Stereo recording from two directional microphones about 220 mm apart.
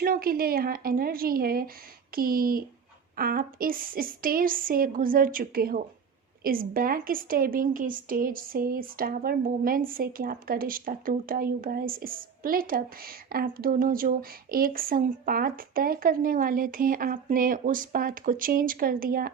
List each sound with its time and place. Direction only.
0.0 s a woman's voice: 40° right (ahead or behind)